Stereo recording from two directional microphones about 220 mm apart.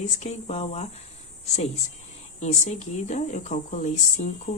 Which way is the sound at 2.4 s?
30° left (ahead or behind).